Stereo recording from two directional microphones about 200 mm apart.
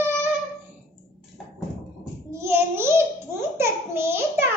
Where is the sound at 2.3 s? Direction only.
15° right (ahead or behind).